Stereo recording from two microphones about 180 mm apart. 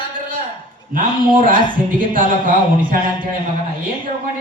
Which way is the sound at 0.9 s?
50° right (ahead or behind).